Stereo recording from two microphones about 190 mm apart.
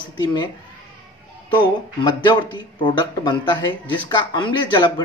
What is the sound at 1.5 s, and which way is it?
Speech, 25° left (ahead or behind).